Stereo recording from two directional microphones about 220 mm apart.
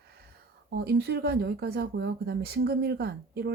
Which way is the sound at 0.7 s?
50° right (ahead or behind).